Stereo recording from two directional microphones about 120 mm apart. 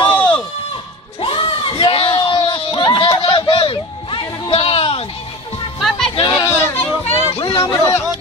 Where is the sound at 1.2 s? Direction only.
45° left (ahead or behind).